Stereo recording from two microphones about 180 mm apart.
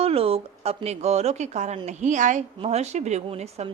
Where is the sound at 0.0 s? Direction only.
30° right (ahead or behind).